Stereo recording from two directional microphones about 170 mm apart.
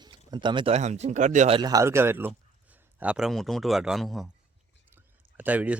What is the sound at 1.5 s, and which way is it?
A man's voice, 25° right (ahead or behind).